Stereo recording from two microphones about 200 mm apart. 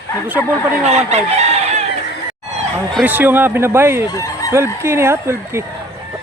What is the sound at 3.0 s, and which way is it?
Speech, 10° right (ahead or behind).